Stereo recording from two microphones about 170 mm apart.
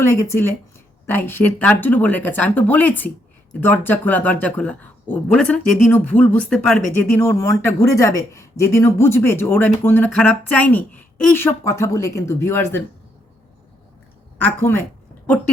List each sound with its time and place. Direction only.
0.0 s speech: 15° left (ahead or behind)